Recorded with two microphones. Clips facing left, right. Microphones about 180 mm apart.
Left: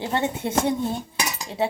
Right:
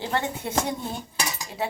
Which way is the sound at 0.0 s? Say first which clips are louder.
Left 3 dB; 20° left (ahead or behind).